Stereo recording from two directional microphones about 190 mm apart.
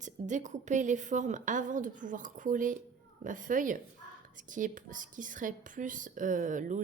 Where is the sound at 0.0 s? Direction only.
40° right (ahead or behind).